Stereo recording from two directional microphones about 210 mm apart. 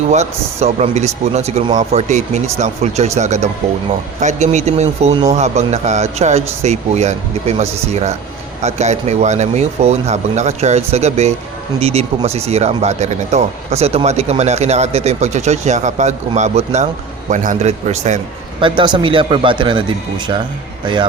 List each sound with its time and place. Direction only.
0.1 s speech: 30° right (ahead or behind)
20.8 s speech: 20° right (ahead or behind)